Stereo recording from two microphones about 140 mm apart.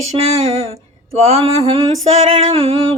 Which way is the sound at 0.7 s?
50° right (ahead or behind).